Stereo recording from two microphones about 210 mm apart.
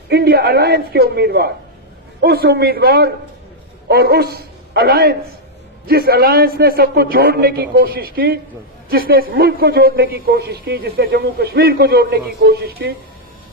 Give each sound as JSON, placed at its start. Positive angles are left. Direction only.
{"t": 0.1, "sound": "a woman's voice", "side_deg": -50}